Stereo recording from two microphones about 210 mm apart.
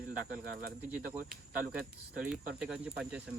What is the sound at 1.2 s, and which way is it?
Speech, 40° right (ahead or behind).